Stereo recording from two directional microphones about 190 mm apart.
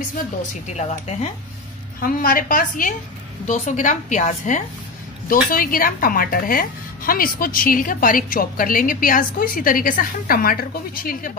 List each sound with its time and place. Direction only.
0.7 s a woman's voice: 35° left (ahead or behind)
2.0 s a woman's voice: 50° left (ahead or behind)